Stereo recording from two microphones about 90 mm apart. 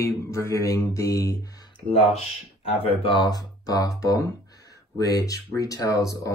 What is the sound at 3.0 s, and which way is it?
Speech, 65° left (ahead or behind).